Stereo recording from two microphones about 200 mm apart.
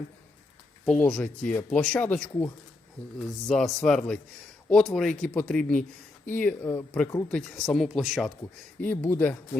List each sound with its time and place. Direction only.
0.9 s speech: 5° left (ahead or behind)